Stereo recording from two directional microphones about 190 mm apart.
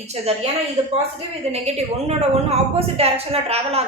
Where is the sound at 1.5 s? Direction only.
35° right (ahead or behind).